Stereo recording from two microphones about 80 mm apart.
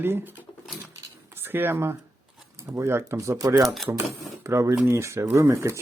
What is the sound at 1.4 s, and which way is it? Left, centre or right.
Speech, right.